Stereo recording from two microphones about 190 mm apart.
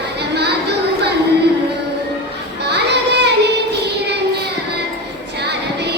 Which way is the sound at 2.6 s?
60° right (ahead or behind).